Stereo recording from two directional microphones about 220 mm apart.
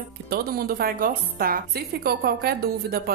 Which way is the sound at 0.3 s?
40° right (ahead or behind).